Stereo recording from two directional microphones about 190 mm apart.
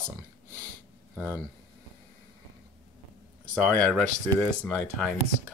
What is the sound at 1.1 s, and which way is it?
Speech, 10° right (ahead or behind).